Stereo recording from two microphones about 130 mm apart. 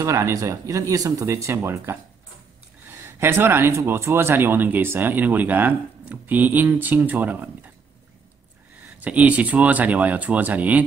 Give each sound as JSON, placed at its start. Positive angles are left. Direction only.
{"t": 0.0, "sound": "speech", "side_deg": -25}
{"t": 3.0, "sound": "speech", "side_deg": -20}
{"t": 9.0, "sound": "speech", "side_deg": -10}